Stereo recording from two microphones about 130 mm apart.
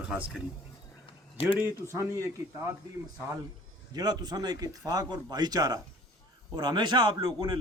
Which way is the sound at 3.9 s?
30° right (ahead or behind).